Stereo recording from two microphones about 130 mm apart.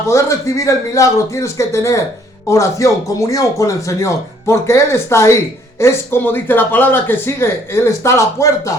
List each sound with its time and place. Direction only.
0.1 s speech: 25° left (ahead or behind)